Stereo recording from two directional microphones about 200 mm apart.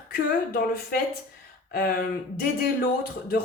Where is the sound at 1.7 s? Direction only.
45° left (ahead or behind).